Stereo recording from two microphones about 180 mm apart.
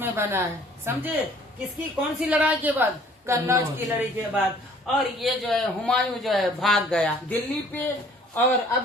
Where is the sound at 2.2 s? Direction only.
10° right (ahead or behind).